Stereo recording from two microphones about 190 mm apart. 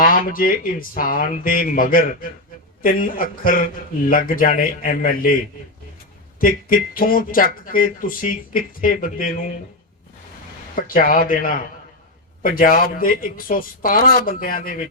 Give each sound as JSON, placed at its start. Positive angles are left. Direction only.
{"t": 0.0, "sound": "speech", "side_deg": 45}
{"t": 6.4, "sound": "speech", "side_deg": 50}
{"t": 10.8, "sound": "speech", "side_deg": 45}